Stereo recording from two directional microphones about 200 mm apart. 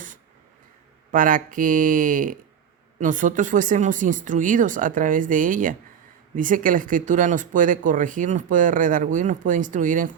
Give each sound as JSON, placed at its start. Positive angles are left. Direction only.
{"t": 1.1, "sound": "speech", "side_deg": -40}